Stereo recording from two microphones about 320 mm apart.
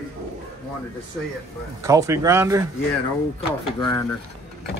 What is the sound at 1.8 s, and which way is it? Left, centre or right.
Speech, centre.